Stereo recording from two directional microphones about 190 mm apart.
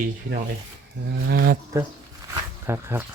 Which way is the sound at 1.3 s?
50° right (ahead or behind).